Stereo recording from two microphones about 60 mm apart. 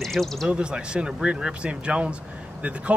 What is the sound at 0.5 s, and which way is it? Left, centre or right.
Speech, centre.